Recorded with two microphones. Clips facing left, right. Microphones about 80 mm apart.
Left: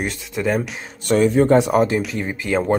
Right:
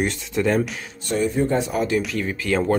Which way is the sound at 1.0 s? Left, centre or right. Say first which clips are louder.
Left 6 dB; left.